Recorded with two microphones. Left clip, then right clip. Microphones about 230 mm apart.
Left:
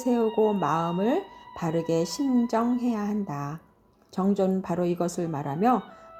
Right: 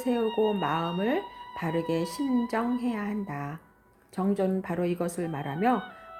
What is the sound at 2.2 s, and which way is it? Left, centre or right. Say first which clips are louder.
Speech: left 3 dB; left.